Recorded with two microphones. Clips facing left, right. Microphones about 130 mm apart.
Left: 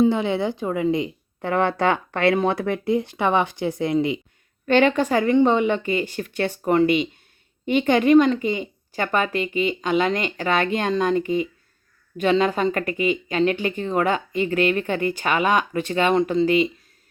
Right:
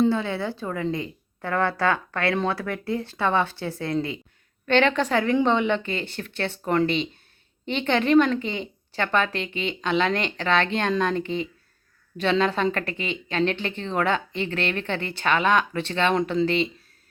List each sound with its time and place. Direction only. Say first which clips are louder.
0.1 s speech: left 4 dB; 20° left (ahead or behind)